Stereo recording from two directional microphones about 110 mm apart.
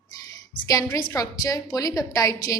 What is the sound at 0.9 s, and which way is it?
A woman's voice, 30° left (ahead or behind).